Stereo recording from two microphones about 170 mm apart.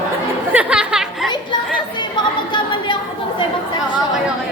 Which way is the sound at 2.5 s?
30° left (ahead or behind).